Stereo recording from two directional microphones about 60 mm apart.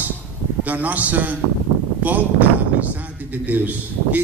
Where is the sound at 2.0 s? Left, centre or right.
Right.